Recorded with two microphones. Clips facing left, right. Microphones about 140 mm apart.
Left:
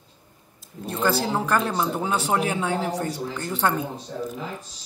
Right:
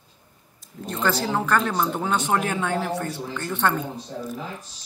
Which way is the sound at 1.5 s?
10° left (ahead or behind).